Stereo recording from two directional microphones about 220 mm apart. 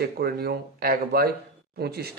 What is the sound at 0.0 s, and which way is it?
Speech, 45° right (ahead or behind).